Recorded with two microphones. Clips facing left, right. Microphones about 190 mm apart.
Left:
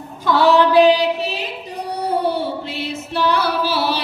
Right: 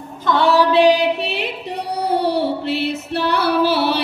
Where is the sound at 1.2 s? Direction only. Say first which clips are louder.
Right 1 dB; 65° right (ahead or behind).